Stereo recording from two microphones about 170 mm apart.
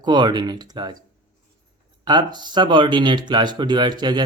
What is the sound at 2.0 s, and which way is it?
Speech, 25° right (ahead or behind).